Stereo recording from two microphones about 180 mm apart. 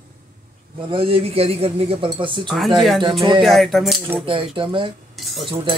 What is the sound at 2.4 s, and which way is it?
Speech, centre (ahead or behind).